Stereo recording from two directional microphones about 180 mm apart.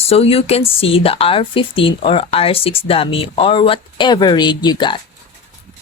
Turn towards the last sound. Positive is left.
turn(degrees=25)  # may be behind; listen again after turning